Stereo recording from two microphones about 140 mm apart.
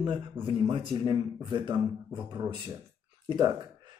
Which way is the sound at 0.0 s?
35° right (ahead or behind).